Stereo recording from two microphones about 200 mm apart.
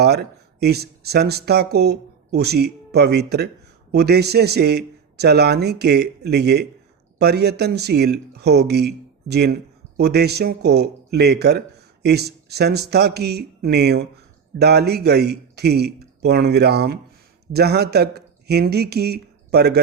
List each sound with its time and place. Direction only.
0.0 s speech: 55° right (ahead or behind)